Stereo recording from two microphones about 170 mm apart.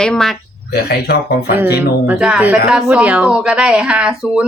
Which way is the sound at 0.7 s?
75° left (ahead or behind).